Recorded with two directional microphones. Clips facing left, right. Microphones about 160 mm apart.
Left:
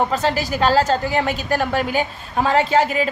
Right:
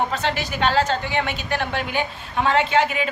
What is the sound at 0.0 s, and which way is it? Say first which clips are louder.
Speech: left 4 dB; 40° left (ahead or behind).